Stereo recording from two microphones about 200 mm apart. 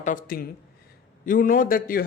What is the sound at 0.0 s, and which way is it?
Speech, 40° left (ahead or behind).